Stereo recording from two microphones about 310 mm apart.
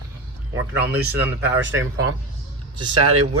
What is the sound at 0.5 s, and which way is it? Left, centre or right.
Speech, centre.